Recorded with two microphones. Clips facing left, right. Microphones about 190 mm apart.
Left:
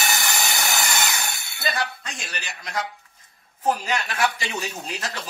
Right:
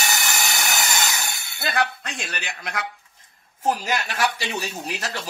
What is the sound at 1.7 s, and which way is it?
A man's voice, 60° right (ahead or behind).